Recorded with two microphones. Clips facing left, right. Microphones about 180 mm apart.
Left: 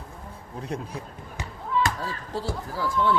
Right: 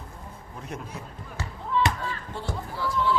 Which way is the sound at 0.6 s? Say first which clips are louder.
Left 4 dB; 30° left (ahead or behind).